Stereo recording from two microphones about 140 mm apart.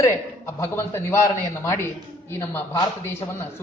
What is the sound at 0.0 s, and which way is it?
A man's voice, 20° left (ahead or behind).